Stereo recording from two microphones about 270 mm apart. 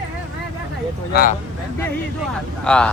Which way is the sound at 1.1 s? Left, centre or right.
Left.